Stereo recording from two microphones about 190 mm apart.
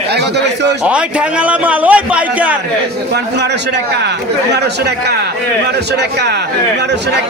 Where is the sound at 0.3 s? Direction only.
65° right (ahead or behind).